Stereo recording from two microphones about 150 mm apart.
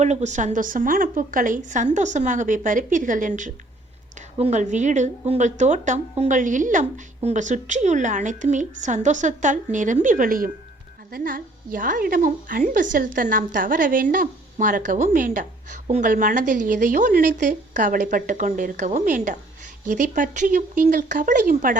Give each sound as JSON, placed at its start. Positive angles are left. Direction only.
{"t": 0.0, "sound": "a woman's voice", "side_deg": -50}
{"t": 4.4, "sound": "a woman's voice", "side_deg": -45}
{"t": 7.2, "sound": "a woman's voice", "side_deg": -50}